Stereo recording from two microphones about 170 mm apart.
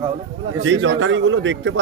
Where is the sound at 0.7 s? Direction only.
90° right.